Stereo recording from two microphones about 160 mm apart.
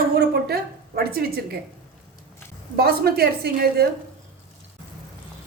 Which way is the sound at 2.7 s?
75° right (ahead or behind).